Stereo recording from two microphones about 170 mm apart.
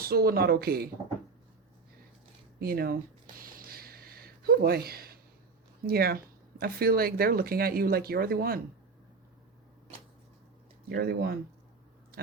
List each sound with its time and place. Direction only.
0.0 s speech: 65° right (ahead or behind)
2.6 s speech: 60° right (ahead or behind)
3.3 s a sound: 55° right (ahead or behind)
5.8 s speech: 65° right (ahead or behind)
10.8 s speech: 70° right (ahead or behind)